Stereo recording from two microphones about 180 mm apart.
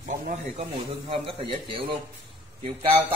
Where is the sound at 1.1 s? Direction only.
30° right (ahead or behind).